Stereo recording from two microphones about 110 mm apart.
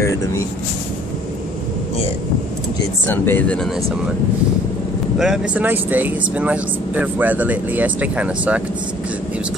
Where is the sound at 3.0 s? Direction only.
20° left (ahead or behind).